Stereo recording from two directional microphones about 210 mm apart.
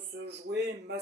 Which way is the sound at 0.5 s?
50° right (ahead or behind).